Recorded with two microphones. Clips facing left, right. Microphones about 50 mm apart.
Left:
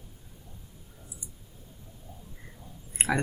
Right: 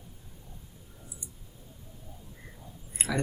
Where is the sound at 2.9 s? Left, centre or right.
Left.